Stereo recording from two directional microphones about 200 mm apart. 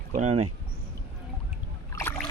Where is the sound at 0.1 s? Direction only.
35° right (ahead or behind).